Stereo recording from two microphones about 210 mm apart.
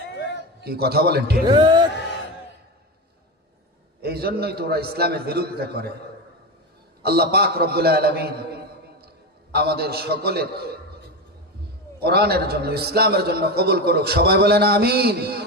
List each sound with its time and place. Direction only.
0.6 s a man's voice: 50° right (ahead or behind)
1.5 s speech: 20° right (ahead or behind)
4.0 s a man's voice: 50° right (ahead or behind)
7.0 s a man's voice: 50° right (ahead or behind)
11.9 s a man's voice: 50° right (ahead or behind)